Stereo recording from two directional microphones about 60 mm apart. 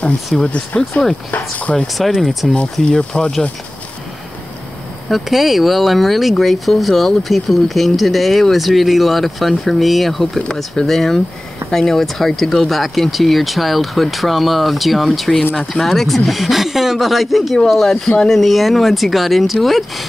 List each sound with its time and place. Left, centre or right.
0.4 s speech: centre
2.0 s speech: centre
2.5 s speech: centre
5.1 s speech: centre